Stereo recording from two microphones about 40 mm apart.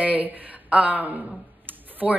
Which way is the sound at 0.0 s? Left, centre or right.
Right.